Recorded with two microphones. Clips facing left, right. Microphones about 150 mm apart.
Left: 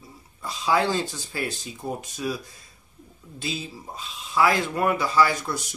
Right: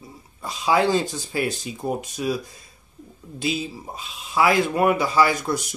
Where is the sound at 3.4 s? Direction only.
15° right (ahead or behind).